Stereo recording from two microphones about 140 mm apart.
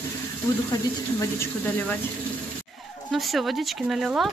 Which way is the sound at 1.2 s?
15° left (ahead or behind).